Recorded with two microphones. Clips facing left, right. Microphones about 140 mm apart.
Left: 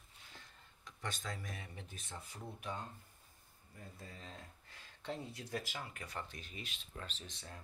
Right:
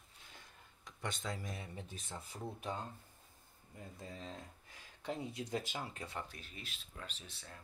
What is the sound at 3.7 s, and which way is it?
Speech, 20° right (ahead or behind).